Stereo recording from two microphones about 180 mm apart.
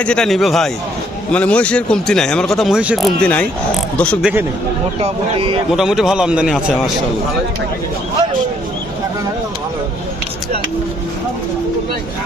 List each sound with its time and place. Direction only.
0.0 s speech: 5° left (ahead or behind)
3.2 s speech: 5° left (ahead or behind)
4.2 s speech: 5° right (ahead or behind)
4.9 s speech: 35° right (ahead or behind)
5.7 s speech: 5° right (ahead or behind)